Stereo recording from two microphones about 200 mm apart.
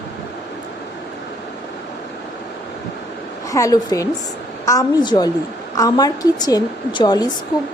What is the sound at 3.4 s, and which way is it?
A woman's voice, 15° left (ahead or behind).